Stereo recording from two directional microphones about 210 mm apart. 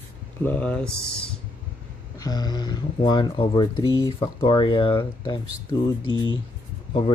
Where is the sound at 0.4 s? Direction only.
5° left (ahead or behind).